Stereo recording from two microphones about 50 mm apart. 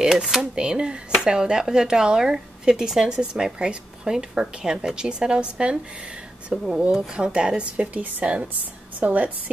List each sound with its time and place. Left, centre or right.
0.0 s speech: centre
6.5 s speech: centre; by 9.3 s right